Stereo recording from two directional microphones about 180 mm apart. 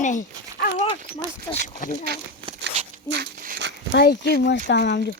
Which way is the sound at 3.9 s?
65° left (ahead or behind).